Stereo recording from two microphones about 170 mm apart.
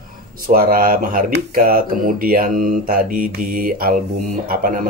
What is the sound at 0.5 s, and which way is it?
Speech, 55° right (ahead or behind).